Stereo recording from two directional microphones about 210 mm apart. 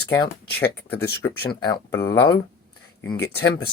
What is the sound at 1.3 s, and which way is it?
Speech, 20° left (ahead or behind).